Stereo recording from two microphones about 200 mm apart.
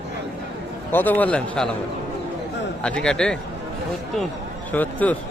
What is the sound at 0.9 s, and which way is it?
Speech, 10° left (ahead or behind).